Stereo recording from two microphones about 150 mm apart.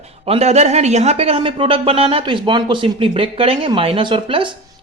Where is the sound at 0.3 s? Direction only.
45° right (ahead or behind).